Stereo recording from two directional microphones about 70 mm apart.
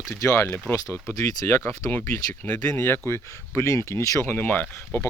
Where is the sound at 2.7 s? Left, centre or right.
Left.